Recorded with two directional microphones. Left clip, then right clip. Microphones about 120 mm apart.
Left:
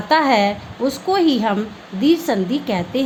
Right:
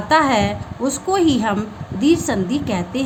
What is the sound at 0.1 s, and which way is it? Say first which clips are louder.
A woman's voice: left 1 dB; 20° left (ahead or behind).